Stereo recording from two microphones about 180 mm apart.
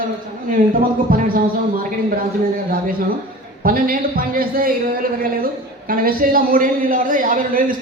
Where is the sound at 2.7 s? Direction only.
55° right (ahead or behind).